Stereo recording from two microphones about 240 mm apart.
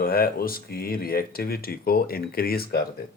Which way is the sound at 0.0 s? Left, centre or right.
Left.